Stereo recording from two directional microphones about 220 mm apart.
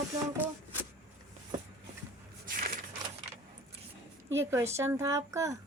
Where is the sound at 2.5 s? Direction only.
40° right (ahead or behind).